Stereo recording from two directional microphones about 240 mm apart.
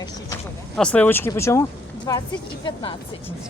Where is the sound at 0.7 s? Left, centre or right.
Centre; by 2.9 s left.